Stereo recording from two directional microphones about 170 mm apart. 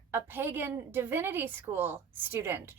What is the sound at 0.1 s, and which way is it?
A woman's voice, 15° right (ahead or behind).